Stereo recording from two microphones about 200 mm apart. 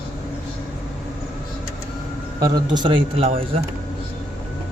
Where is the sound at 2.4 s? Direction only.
20° right (ahead or behind).